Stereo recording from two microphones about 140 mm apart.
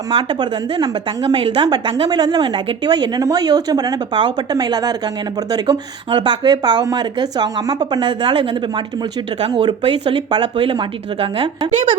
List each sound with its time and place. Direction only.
0.1 s a woman's voice: 35° right (ahead or behind)